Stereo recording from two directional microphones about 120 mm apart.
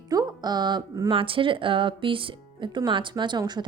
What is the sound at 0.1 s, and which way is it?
A woman's voice, 35° right (ahead or behind).